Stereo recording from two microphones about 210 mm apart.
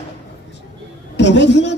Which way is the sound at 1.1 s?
55° left (ahead or behind).